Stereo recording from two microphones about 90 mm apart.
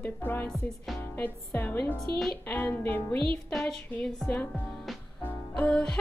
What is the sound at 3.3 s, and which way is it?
Speech, 10° left (ahead or behind).